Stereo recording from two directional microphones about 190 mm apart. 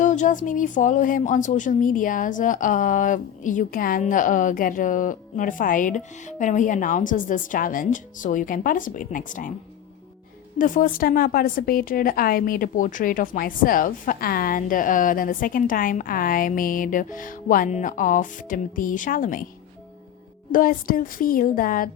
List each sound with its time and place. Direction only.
0.0 s a woman's voice: 40° left (ahead or behind)
10.6 s a woman's voice: 45° left (ahead or behind)
20.5 s a woman's voice: 45° left (ahead or behind)